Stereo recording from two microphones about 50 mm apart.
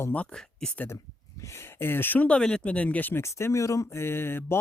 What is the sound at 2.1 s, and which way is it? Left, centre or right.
Speech, left.